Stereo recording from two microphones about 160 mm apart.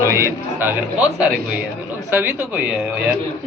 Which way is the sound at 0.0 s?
15° right (ahead or behind).